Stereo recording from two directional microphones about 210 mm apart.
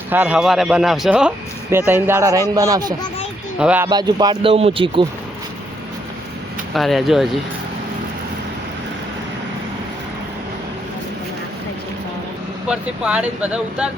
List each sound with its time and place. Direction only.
0.1 s speech: 5° right (ahead or behind)
3.6 s speech: 5° right (ahead or behind)
3.8 s speech: 20° right (ahead or behind)
6.7 s speech: centre (ahead or behind)
12.6 s speech: 5° right (ahead or behind)